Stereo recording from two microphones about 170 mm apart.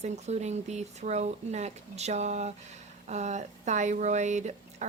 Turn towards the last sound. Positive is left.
turn(degrees=-45)  # may be behind; listen again after turning